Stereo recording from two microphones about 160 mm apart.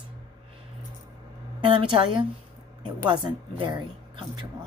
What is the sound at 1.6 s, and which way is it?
A woman's voice, 35° right (ahead or behind).